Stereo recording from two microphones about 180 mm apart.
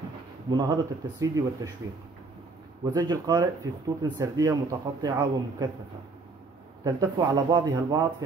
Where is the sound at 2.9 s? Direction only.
20° right (ahead or behind).